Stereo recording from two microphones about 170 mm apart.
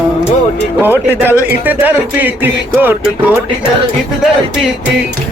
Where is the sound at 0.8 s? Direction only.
10° right (ahead or behind).